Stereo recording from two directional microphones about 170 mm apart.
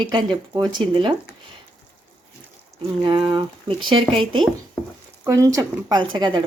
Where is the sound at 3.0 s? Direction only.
30° right (ahead or behind).